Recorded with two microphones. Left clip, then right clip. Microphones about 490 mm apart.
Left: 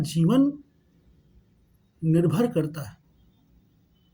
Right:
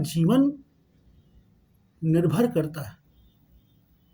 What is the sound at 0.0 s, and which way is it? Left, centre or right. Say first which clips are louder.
Speech: even; right.